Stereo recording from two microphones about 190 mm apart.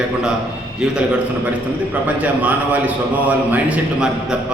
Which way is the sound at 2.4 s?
10° right (ahead or behind).